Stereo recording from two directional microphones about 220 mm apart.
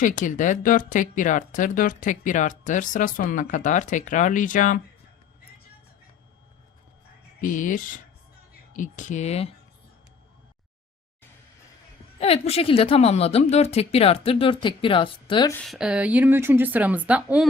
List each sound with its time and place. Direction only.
0.0 s speech: 35° left (ahead or behind)
7.4 s speech: 35° left (ahead or behind)
12.2 s a woman's voice: 25° left (ahead or behind)
15.5 s speech: centre (ahead or behind)